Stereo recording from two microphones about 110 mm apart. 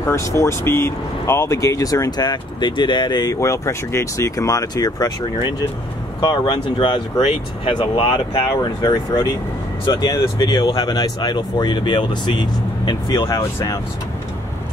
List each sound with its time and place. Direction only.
0.0 s speech: 25° left (ahead or behind)
3.3 s speech: 25° left (ahead or behind)
6.2 s speech: 50° left (ahead or behind)
13.1 s speech: 30° left (ahead or behind)